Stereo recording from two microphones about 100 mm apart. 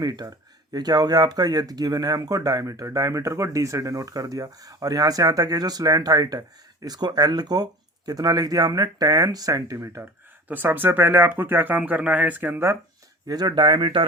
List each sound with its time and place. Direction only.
0.0 s speech: 40° right (ahead or behind)
10.5 s speech: 20° right (ahead or behind)
13.2 s speech: 45° right (ahead or behind)